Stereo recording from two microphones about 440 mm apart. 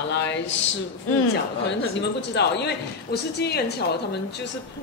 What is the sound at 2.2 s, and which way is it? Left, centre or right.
A woman's voice, left.